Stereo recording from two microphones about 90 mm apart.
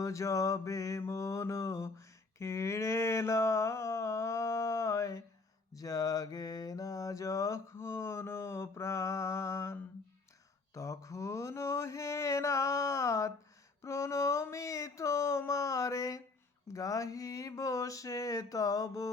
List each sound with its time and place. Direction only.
0.0 s mantra: 35° left (ahead or behind)
10.8 s mantra: 35° left (ahead or behind)
13.8 s a sound: 35° left (ahead or behind)